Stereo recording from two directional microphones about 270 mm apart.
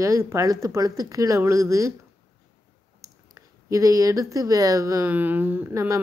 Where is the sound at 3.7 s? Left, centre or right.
Centre.